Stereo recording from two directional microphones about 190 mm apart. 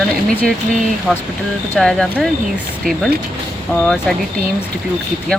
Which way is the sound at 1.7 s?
Centre (ahead or behind).